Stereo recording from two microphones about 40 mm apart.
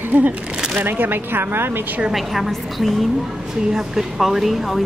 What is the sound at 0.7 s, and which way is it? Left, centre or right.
Speech, right.